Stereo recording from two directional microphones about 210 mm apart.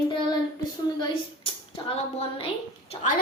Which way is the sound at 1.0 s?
25° left (ahead or behind).